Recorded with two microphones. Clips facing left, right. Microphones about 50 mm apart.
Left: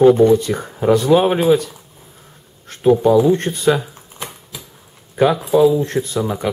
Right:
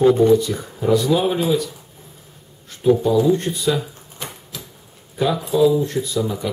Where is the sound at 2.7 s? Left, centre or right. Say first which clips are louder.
Left 4 dB; left.